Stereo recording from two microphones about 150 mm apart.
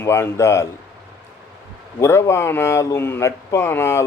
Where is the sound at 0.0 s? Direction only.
15° left (ahead or behind).